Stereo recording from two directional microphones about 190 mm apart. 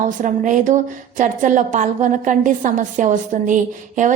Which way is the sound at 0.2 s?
40° right (ahead or behind).